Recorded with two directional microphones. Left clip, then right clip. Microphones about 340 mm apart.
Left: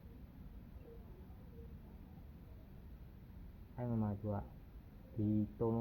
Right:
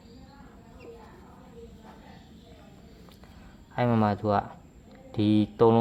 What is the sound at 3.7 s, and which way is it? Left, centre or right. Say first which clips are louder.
Speech: right 18 dB; right.